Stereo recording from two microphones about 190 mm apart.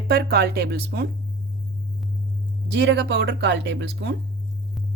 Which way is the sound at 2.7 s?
65° right (ahead or behind).